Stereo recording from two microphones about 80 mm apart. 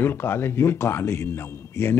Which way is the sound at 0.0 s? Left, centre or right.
Left.